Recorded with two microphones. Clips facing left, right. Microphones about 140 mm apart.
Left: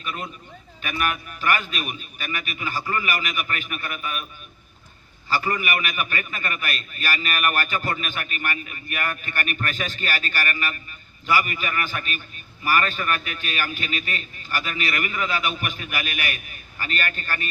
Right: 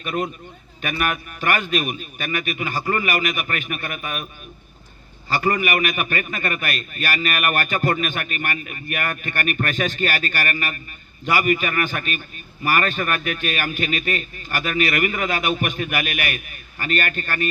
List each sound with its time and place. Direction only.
0.0 s a man's voice: 45° right (ahead or behind)
5.4 s a man's voice: 45° right (ahead or behind)